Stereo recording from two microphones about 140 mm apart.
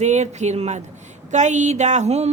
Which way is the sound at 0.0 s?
55° right (ahead or behind).